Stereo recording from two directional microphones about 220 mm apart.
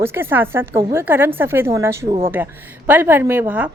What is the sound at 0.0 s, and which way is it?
A woman's voice, 10° right (ahead or behind).